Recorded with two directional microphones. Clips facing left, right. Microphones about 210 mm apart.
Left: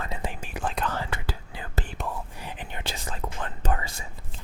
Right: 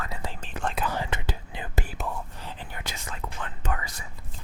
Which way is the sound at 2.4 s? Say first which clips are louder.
Left 2 dB; 15° left (ahead or behind).